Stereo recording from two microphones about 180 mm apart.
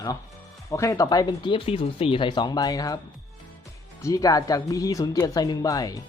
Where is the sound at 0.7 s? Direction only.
15° left (ahead or behind).